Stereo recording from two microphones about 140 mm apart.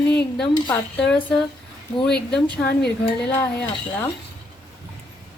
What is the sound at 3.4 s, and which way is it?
Speech, 15° left (ahead or behind).